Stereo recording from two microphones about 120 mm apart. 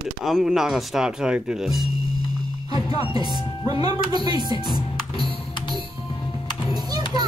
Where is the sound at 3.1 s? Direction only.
35° right (ahead or behind).